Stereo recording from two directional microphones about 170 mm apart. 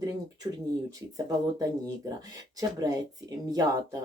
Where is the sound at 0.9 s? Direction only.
20° right (ahead or behind).